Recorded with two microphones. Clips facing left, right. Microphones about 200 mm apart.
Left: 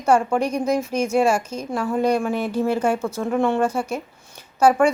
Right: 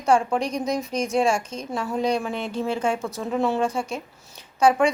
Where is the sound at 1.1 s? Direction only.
Centre (ahead or behind).